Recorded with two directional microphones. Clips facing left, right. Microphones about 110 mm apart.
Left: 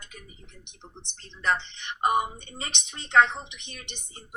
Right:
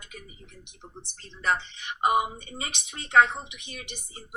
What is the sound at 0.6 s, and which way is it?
Speech, 10° right (ahead or behind).